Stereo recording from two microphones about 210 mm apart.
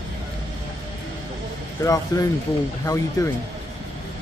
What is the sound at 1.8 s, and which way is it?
Speech, 15° left (ahead or behind).